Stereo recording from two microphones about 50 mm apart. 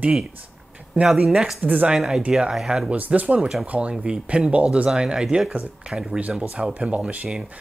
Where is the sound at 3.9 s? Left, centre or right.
Centre.